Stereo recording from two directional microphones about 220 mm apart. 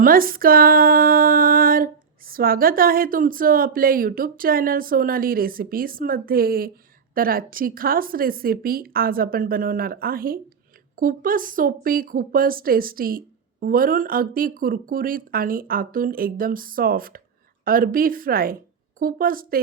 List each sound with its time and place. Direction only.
0.0 s speech: 40° right (ahead or behind)